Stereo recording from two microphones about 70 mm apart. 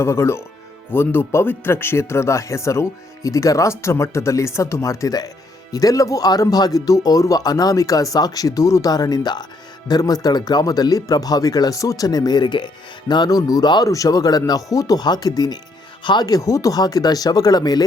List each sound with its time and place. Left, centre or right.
0.0 s speech: left
8.9 s speech: left
9.9 s speech: left
13.8 s speech: left
16.1 s speech: left